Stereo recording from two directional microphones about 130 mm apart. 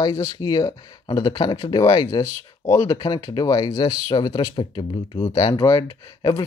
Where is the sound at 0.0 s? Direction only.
25° left (ahead or behind).